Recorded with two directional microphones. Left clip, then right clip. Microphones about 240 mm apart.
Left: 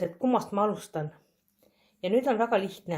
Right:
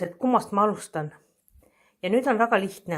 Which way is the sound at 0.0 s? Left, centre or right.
Centre.